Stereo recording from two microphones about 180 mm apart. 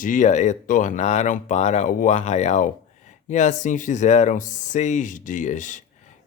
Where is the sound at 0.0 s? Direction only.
45° left (ahead or behind).